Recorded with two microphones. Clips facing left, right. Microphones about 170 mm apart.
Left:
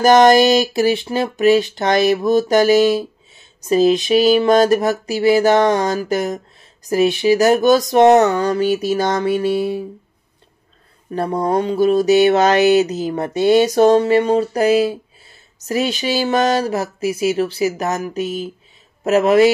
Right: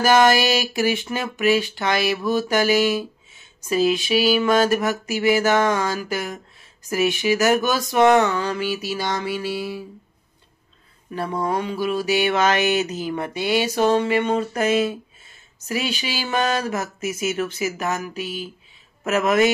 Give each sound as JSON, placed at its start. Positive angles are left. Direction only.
{"t": 0.0, "sound": "speech", "side_deg": 40}
{"t": 11.1, "sound": "speech", "side_deg": 40}